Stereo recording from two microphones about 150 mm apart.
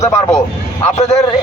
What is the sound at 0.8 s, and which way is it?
Speech, 50° left (ahead or behind).